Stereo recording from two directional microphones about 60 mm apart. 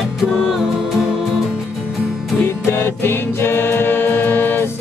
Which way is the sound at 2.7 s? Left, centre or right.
Left.